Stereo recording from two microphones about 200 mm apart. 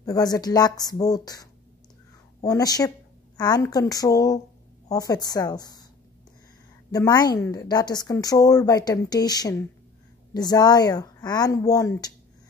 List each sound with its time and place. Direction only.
0.0 s a woman's voice: 20° left (ahead or behind)
6.9 s a woman's voice: 20° left (ahead or behind)